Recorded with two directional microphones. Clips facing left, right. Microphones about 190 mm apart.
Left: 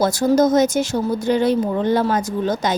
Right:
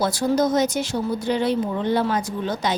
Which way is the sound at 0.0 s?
45° left (ahead or behind).